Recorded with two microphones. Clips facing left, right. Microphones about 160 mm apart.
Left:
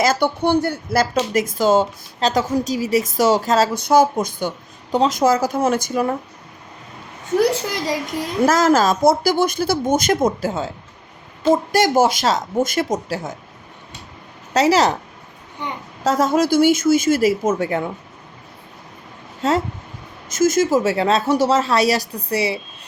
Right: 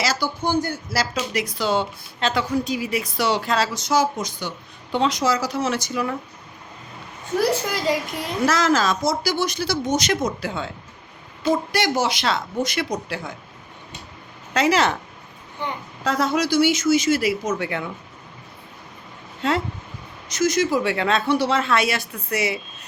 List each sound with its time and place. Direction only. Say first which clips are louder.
0.0 s speech: left 6 dB; 60° left (ahead or behind)
8.4 s speech: left 4 dB; 45° left (ahead or behind)
14.5 s a woman's voice: left 4 dB; 40° left (ahead or behind)
16.0 s a woman's voice: left 5 dB; 45° left (ahead or behind)
19.4 s a woman's voice: left 4 dB; 40° left (ahead or behind)